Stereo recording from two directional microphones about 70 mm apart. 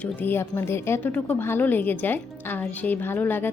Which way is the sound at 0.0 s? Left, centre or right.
Left.